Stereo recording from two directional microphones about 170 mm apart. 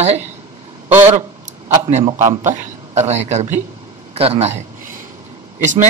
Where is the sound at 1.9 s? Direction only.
40° right (ahead or behind).